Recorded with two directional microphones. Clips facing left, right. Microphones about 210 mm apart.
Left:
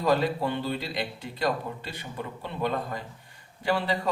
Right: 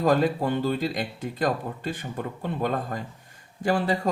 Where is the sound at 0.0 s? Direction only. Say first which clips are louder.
Right 3 dB; 50° right (ahead or behind).